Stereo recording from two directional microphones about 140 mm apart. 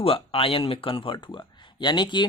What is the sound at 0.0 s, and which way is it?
Speech, 40° left (ahead or behind).